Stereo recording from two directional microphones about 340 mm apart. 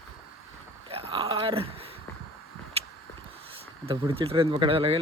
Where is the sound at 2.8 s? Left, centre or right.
Centre.